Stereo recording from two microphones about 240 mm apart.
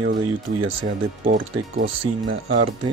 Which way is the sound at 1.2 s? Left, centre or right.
Right.